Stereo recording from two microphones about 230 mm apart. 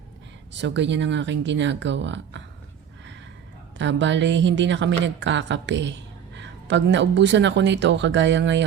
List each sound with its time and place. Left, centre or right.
0.5 s speech: right
3.8 s speech: right